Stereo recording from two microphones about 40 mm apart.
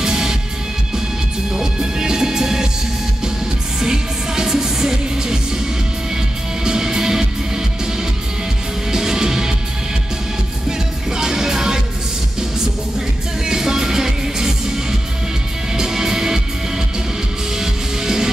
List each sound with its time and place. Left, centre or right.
0.0 s music: centre
1.5 s music: centre
3.8 s music: centre
6.6 s music: centre
8.9 s music: centre
11.1 s music: centre
13.5 s music: centre
17.6 s music: centre